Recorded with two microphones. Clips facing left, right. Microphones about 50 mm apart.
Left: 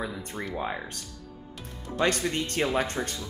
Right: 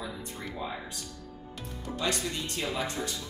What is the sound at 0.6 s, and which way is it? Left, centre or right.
Speech, left.